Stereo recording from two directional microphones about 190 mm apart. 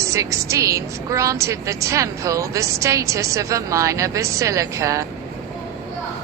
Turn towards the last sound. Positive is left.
turn(degrees=-15)  # may be behind; listen again after turning